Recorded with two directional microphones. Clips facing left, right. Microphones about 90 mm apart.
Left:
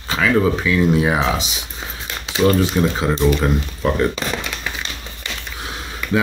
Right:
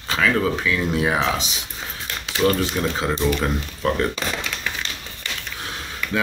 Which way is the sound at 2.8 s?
5° left (ahead or behind).